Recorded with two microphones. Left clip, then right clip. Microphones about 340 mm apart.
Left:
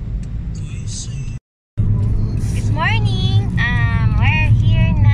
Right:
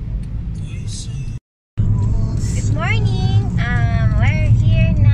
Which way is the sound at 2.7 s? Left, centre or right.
Centre.